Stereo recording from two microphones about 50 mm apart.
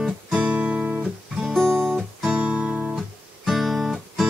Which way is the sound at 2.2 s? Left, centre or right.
Right.